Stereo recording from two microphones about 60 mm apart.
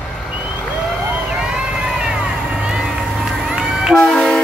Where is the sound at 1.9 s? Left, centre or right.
Centre.